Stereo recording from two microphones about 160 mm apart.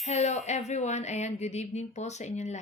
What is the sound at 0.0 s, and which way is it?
Speech, 45° left (ahead or behind).